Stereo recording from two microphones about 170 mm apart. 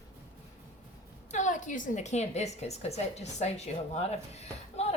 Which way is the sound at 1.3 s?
45° left (ahead or behind).